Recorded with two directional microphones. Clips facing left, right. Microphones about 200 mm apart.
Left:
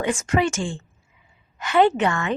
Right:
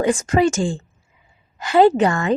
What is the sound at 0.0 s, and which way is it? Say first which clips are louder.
A woman's voice: right 5 dB; 35° right (ahead or behind).